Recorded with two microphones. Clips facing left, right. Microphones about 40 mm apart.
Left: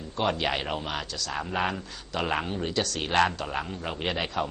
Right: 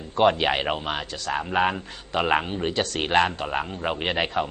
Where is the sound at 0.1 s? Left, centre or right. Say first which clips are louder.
Right 7 dB; right.